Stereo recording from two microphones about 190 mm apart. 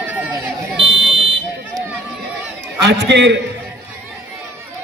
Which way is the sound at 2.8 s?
65° right (ahead or behind).